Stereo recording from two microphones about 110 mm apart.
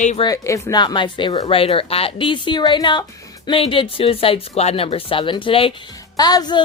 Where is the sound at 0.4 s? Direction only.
30° left (ahead or behind).